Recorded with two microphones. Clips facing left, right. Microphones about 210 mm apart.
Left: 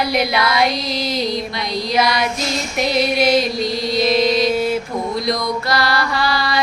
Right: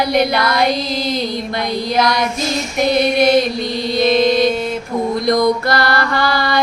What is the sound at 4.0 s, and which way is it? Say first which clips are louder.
Chant: right 3 dB; 50° right (ahead or behind).